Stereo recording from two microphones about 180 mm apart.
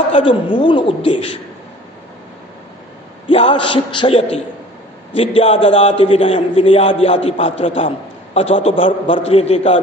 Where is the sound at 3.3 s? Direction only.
30° left (ahead or behind).